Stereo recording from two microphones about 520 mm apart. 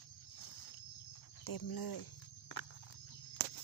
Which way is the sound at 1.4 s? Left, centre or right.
Left.